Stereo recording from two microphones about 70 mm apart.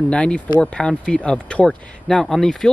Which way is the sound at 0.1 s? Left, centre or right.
Centre.